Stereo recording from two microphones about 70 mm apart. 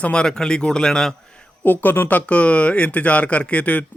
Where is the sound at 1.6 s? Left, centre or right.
Left.